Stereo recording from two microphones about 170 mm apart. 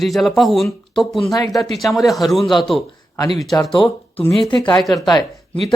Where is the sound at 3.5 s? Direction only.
20° left (ahead or behind).